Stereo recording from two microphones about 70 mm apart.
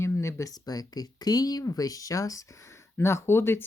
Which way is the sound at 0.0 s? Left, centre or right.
Left.